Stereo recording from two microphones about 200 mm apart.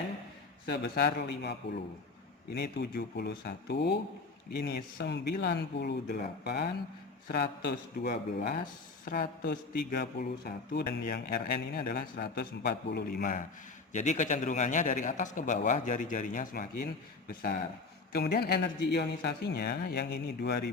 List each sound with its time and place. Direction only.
0.7 s a man's voice: 50° left (ahead or behind)